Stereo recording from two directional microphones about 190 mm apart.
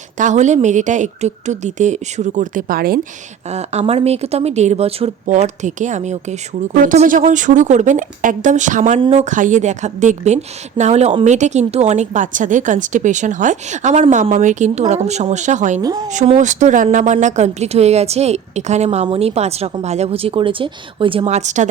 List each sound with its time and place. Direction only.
0.2 s a woman's voice: 40° right (ahead or behind)
3.5 s a woman's voice: 35° right (ahead or behind)
9.0 s a woman's voice: 30° right (ahead or behind)
15.8 s speech: 20° right (ahead or behind)
16.0 s a woman's voice: 35° right (ahead or behind)